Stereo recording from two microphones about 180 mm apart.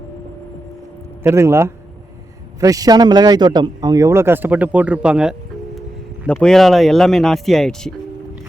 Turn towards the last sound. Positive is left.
turn(degrees=0)  # may be behind; listen again after turning